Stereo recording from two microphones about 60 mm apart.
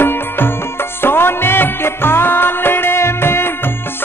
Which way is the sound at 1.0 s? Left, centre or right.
Left.